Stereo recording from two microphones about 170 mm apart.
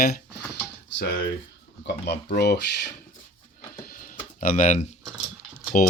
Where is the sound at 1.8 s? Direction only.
85° left.